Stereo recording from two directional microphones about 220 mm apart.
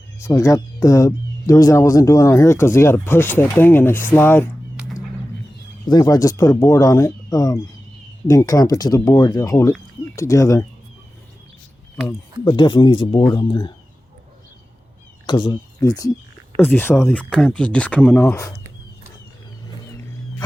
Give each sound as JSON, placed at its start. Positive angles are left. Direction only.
{"t": 0.3, "sound": "speech", "side_deg": 15}
{"t": 5.9, "sound": "speech", "side_deg": 20}
{"t": 12.5, "sound": "speech", "side_deg": 20}
{"t": 15.3, "sound": "speech", "side_deg": 20}